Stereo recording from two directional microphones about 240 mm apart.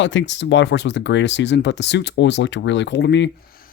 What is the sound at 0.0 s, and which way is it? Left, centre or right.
Speech, left.